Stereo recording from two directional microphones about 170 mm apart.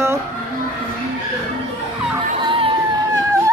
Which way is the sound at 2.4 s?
30° right (ahead or behind).